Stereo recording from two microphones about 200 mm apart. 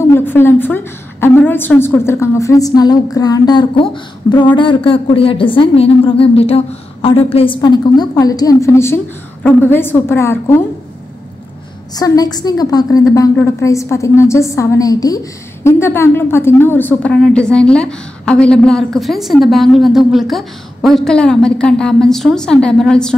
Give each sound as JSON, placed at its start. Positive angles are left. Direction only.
{"t": 0.1, "sound": "a woman's voice", "side_deg": 10}
{"t": 11.9, "sound": "a woman's voice", "side_deg": 20}